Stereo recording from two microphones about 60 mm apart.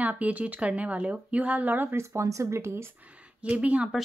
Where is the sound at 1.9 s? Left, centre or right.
Right.